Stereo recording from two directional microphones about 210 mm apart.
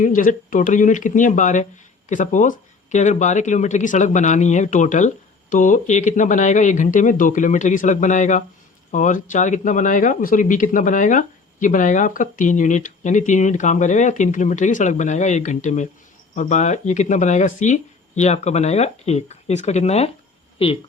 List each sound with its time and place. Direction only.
0.0 s a woman's voice: 40° left (ahead or behind)